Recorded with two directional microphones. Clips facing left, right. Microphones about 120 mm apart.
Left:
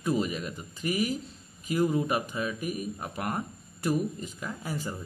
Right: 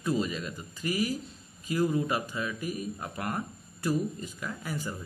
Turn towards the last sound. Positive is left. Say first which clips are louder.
# left 1 dB
turn(degrees=20)  # may be behind; listen again after turning